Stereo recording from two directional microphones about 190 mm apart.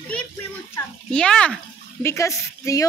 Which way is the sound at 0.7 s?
5° left (ahead or behind).